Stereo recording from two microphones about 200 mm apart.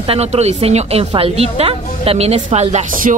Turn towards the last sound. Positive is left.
turn(degrees=-35)  # may be behind; listen again after turning